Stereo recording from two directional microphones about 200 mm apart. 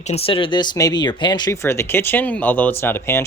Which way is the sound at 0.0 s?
30° left (ahead or behind).